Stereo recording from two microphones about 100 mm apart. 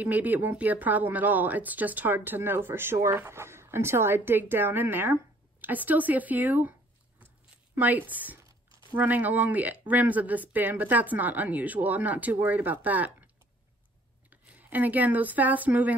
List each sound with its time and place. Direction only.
0.0 s speech: 15° right (ahead or behind)
7.7 s speech: 15° right (ahead or behind)
14.3 s speech: 15° right (ahead or behind)